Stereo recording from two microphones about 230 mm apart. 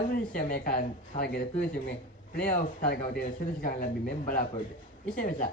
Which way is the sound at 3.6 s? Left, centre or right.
Left.